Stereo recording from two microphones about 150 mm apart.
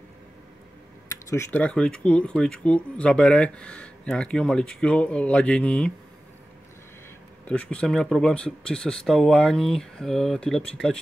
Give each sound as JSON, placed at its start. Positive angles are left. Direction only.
{"t": 1.0, "sound": "typing", "side_deg": 20}
{"t": 1.5, "sound": "speech", "side_deg": 10}
{"t": 7.4, "sound": "speech", "side_deg": 10}